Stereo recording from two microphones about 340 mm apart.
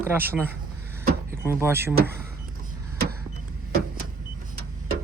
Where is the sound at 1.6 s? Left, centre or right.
Centre.